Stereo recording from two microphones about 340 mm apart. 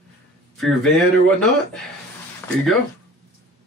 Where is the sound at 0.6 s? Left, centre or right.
Centre.